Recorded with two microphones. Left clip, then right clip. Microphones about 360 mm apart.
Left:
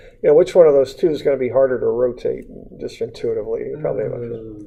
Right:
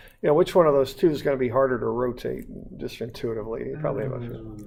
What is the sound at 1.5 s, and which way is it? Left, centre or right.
Speech, right.